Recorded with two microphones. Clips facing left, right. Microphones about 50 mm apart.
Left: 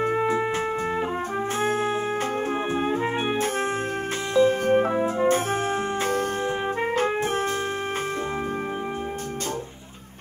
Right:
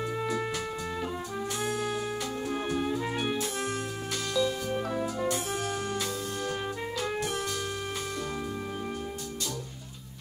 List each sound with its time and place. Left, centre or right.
0.0 s music: left
1.6 s music: left